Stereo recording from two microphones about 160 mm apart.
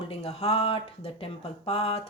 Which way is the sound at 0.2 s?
40° left (ahead or behind).